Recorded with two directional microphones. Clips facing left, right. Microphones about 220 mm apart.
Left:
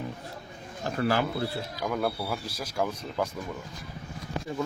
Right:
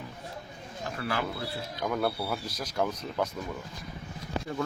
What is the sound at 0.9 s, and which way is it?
Speech, 35° left (ahead or behind).